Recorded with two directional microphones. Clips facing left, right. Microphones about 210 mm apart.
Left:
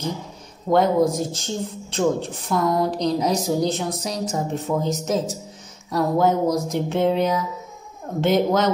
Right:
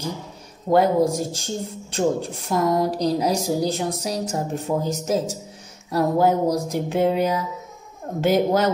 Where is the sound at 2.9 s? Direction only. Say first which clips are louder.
Even; 5° right (ahead or behind).